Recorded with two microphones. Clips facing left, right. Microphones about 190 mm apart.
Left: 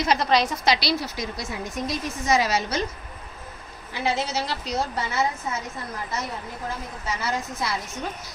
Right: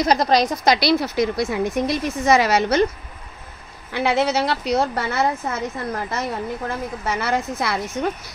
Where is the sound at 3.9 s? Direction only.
65° right (ahead or behind).